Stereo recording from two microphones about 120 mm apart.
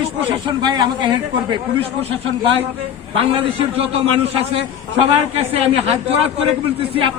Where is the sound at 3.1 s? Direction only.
50° right (ahead or behind).